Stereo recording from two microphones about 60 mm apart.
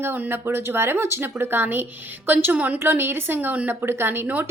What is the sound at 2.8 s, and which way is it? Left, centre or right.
A woman's voice, right.